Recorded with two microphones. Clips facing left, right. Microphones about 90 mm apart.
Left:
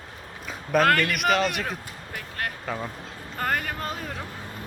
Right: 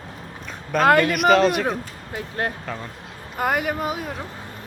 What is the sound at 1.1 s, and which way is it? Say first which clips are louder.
Speech: right 7 dB; centre (ahead or behind).